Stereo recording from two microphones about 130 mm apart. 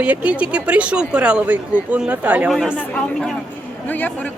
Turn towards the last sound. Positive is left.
turn(degrees=15)  # may be behind; listen again after turning